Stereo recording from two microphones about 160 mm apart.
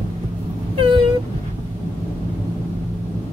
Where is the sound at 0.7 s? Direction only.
35° right (ahead or behind).